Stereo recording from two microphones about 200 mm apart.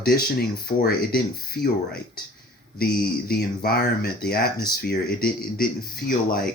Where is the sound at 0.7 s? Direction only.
50° left (ahead or behind).